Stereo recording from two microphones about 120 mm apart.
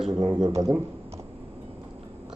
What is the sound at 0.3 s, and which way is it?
Speech, 30° right (ahead or behind).